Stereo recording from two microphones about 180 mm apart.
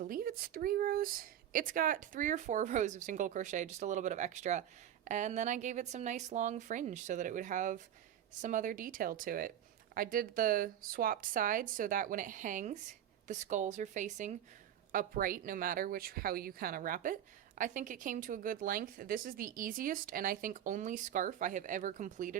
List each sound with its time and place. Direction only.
0.0 s speech: 50° right (ahead or behind)